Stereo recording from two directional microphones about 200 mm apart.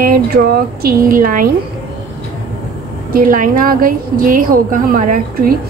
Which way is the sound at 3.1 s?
45° right (ahead or behind).